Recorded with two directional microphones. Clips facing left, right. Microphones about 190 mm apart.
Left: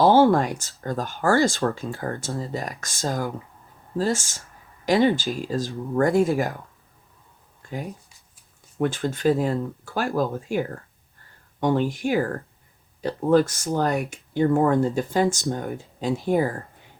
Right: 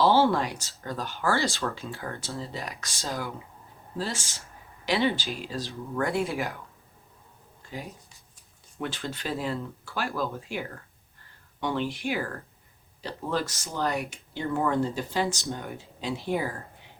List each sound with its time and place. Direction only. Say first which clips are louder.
0.0 s speech: left 5 dB; 50° left (ahead or behind)
7.6 s a sound: left 6 dB; 50° left (ahead or behind)
8.8 s speech: left 11 dB; 50° left (ahead or behind)